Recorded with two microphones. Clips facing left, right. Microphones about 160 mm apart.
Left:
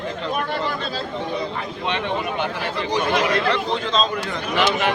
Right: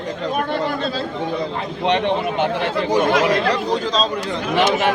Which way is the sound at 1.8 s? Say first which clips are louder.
Right 7 dB; 65° right (ahead or behind).